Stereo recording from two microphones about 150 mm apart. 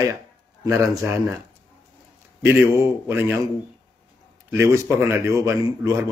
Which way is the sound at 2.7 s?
15° right (ahead or behind).